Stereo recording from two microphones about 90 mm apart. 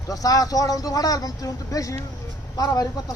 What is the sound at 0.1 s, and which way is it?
Speech, 40° left (ahead or behind).